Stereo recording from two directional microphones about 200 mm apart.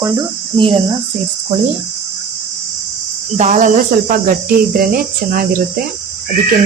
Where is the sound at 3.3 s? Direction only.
35° right (ahead or behind).